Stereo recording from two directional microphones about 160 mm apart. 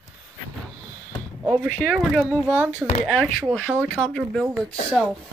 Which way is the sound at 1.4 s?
5° right (ahead or behind).